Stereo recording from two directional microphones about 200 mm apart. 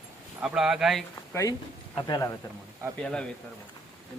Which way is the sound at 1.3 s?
15° left (ahead or behind).